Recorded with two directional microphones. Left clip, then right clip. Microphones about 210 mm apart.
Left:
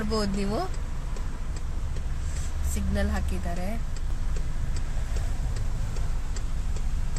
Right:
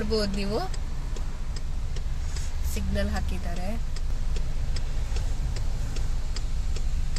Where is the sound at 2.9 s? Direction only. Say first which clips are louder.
Even; 10° left (ahead or behind).